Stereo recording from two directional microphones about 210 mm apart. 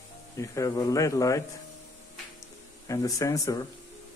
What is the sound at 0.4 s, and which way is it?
Speech, 15° left (ahead or behind).